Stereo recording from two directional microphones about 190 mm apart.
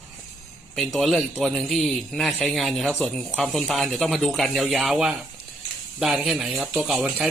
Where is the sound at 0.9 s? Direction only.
Centre (ahead or behind).